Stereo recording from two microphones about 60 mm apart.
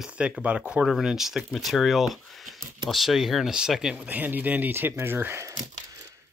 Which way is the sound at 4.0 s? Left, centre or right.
Right.